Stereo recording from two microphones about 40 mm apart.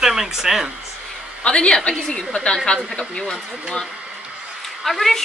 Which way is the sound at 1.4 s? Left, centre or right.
Left.